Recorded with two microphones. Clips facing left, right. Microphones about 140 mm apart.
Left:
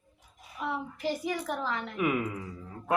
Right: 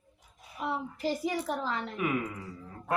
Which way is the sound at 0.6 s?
35° right (ahead or behind).